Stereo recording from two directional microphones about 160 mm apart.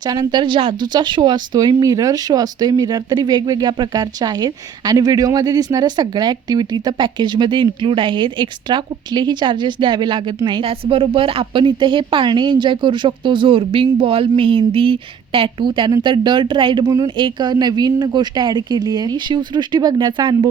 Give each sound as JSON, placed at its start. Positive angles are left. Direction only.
{"t": 0.0, "sound": "speech", "side_deg": -25}